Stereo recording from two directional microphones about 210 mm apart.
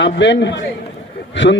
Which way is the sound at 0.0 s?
60° left (ahead or behind).